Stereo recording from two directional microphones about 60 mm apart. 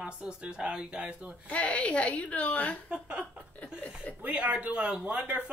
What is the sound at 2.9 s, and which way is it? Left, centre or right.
A woman's voice, centre.